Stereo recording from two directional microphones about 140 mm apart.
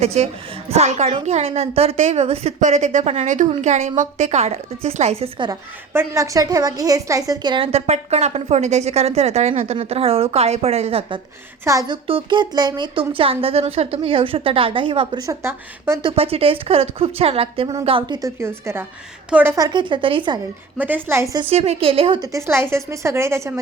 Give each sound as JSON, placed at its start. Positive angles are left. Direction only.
{"t": 0.0, "sound": "a woman's voice", "side_deg": -45}
{"t": 2.6, "sound": "a woman's voice", "side_deg": -60}
{"t": 5.5, "sound": "a woman's voice", "side_deg": -20}
{"t": 11.6, "sound": "a woman's voice", "side_deg": -25}
{"t": 12.0, "sound": "speech", "side_deg": -40}
{"t": 16.0, "sound": "a woman's voice", "side_deg": -45}
{"t": 18.3, "sound": "a woman's voice", "side_deg": -20}
{"t": 19.5, "sound": "speech", "side_deg": -30}
{"t": 20.7, "sound": "a woman's voice", "side_deg": -10}
{"t": 21.5, "sound": "a woman's voice", "side_deg": -50}
{"t": 22.2, "sound": "a woman's voice", "side_deg": -20}